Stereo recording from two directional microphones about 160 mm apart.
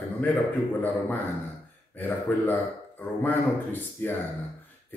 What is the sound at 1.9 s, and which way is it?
Speech, 10° left (ahead or behind).